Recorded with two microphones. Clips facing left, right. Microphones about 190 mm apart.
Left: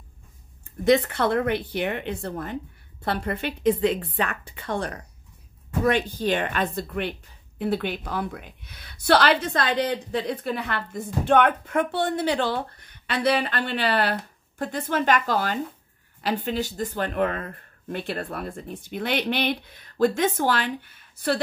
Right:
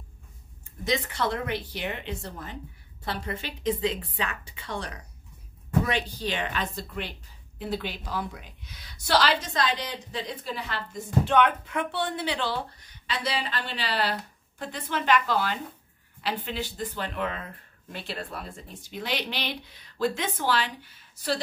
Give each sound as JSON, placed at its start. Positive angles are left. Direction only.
{"t": 0.8, "sound": "a woman's voice", "side_deg": 60}